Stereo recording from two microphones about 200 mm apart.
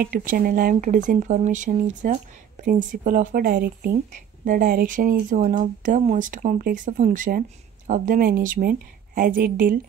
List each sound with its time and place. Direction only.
0.0 s speech: 45° right (ahead or behind)